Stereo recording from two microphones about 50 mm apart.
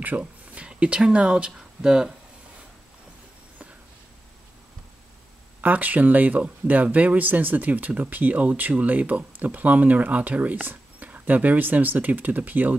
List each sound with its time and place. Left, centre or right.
0.1 s speech: right
0.7 s speech: right
5.6 s speech: right